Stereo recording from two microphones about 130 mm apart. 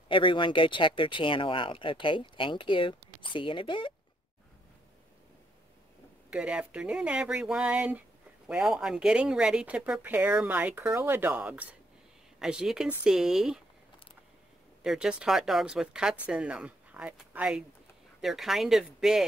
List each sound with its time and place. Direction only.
0.1 s speech: 40° left (ahead or behind)
6.3 s speech: 10° right (ahead or behind)
14.8 s speech: 5° right (ahead or behind)